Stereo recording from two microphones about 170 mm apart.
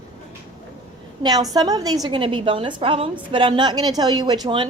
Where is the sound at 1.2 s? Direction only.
20° right (ahead or behind).